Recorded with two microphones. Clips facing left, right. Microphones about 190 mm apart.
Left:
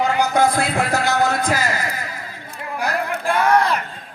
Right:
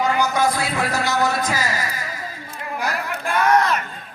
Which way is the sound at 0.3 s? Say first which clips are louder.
Left 3 dB; 55° left (ahead or behind).